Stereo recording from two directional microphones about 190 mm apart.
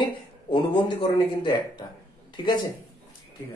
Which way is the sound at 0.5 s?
25° left (ahead or behind).